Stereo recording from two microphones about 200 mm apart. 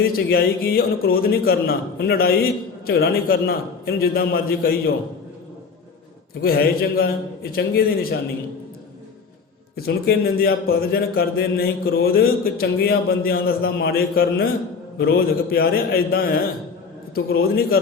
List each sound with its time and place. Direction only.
0.0 s speech: 50° left (ahead or behind)
6.4 s speech: 50° left (ahead or behind)
9.7 s speech: 50° left (ahead or behind)